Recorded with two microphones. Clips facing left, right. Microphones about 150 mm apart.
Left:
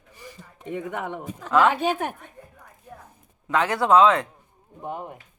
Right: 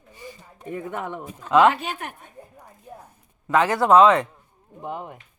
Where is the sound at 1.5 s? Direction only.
20° right (ahead or behind).